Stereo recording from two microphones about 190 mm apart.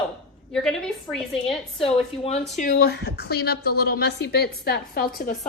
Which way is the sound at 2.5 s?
50° left (ahead or behind).